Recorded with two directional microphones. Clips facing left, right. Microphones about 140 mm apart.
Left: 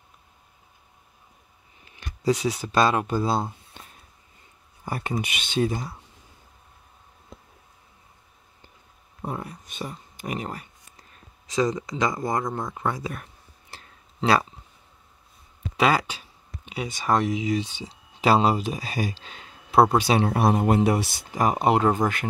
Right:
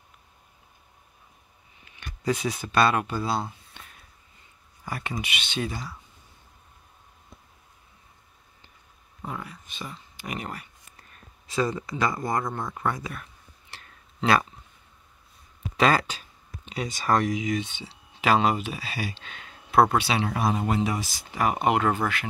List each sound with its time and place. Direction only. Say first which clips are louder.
2.6 s speech: even; 25° left (ahead or behind)
3.8 s a sound: left 2 dB; 40° left (ahead or behind)
4.8 s speech: left 4 dB; 40° left (ahead or behind)
9.2 s speech: left 4 dB; 35° left (ahead or behind)
11.0 s speech: even; 20° left (ahead or behind)
12.4 s speech: left 2 dB; centre (ahead or behind)
12.7 s speech: left 1 dB; 25° left (ahead or behind)
13.1 s a sound: left 3 dB; 35° left (ahead or behind)
15.8 s speech: even; 10° left (ahead or behind); by 20.0 s 30° left (ahead or behind)
20.0 s speech: left 5 dB; 45° left (ahead or behind)
21.3 s speech: left 2 dB; 35° left (ahead or behind)
22.0 s speech: left 4 dB; 45° left (ahead or behind)